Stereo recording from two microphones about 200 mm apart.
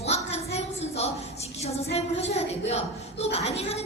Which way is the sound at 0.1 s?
35° left (ahead or behind).